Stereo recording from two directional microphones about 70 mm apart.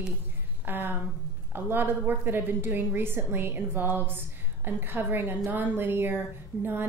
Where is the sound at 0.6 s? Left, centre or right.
Right.